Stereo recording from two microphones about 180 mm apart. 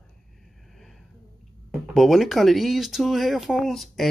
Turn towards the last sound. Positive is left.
turn(degrees=0)  # may be behind; listen again after turning